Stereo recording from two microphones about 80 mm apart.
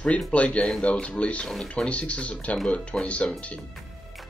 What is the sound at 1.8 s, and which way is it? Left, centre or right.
Speech, centre.